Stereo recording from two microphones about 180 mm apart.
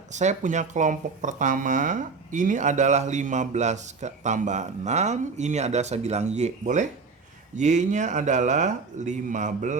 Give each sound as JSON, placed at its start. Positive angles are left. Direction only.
{"t": 0.1, "sound": "speech", "side_deg": -40}